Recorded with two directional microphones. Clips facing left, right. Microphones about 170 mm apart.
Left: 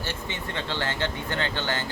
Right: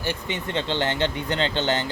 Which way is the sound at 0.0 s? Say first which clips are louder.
Right 5 dB; 15° right (ahead or behind).